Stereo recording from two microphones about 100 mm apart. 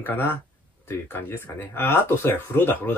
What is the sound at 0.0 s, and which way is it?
Speech, 20° left (ahead or behind).